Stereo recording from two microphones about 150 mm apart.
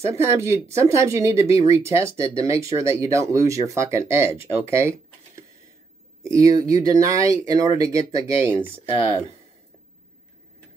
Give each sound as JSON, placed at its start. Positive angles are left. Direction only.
{"t": 0.0, "sound": "speech", "side_deg": -20}